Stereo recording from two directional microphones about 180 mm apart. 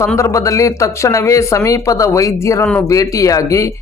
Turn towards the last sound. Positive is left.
turn(degrees=15)  # may be behind; listen again after turning